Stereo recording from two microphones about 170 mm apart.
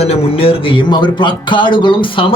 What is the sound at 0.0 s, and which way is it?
Speech, 35° left (ahead or behind).